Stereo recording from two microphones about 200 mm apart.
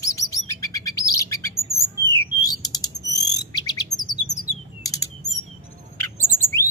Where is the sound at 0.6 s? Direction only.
15° left (ahead or behind).